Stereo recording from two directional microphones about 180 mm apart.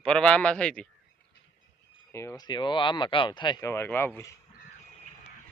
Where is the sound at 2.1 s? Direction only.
20° left (ahead or behind).